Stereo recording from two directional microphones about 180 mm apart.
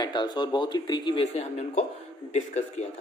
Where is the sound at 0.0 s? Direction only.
25° left (ahead or behind).